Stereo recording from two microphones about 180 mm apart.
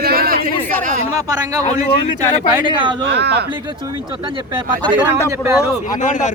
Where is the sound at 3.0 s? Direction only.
70° right (ahead or behind).